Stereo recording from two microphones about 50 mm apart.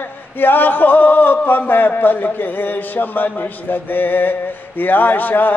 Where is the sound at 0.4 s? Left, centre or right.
Left.